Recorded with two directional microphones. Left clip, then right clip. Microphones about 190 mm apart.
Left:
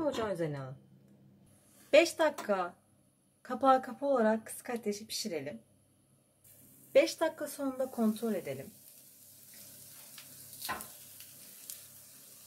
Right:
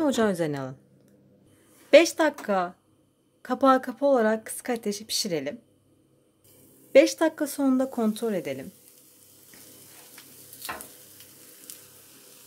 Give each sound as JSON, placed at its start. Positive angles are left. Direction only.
{"t": 0.0, "sound": "a woman's voice", "side_deg": -55}
{"t": 1.9, "sound": "a woman's voice", "side_deg": -40}
{"t": 6.9, "sound": "speech", "side_deg": -45}